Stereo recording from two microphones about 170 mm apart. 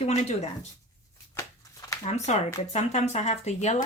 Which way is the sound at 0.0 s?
40° left (ahead or behind).